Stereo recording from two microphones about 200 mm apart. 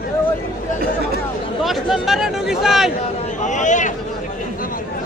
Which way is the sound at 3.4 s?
35° left (ahead or behind).